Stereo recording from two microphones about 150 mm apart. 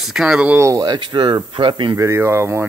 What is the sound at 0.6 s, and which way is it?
Speech, 20° right (ahead or behind).